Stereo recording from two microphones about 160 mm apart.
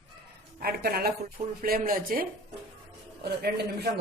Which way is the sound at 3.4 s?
85° right.